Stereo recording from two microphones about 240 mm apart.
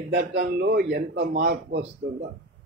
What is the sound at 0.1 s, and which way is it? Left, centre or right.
A man's voice, right.